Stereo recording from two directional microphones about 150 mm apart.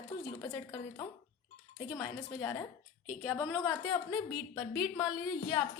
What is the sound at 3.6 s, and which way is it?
A woman's voice, 30° left (ahead or behind).